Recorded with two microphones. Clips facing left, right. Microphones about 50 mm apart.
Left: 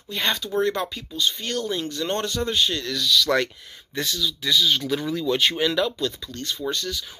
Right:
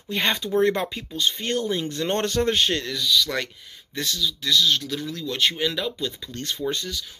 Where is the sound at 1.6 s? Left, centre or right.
Centre.